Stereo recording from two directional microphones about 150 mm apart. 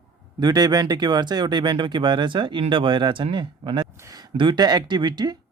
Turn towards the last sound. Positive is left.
turn(degrees=-30)  # may be behind; listen again after turning